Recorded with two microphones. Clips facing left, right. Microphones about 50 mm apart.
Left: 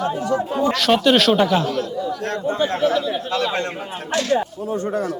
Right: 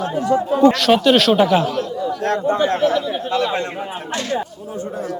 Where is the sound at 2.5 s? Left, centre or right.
Right.